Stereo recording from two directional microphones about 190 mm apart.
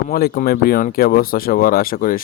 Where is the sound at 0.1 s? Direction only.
50° left (ahead or behind).